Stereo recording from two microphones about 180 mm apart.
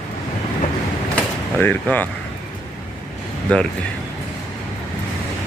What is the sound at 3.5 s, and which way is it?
Speech, 5° left (ahead or behind).